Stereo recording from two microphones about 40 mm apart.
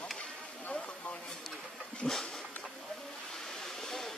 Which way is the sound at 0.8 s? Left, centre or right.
Left.